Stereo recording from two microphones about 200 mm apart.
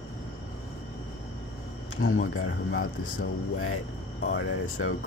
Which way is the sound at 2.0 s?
90° left.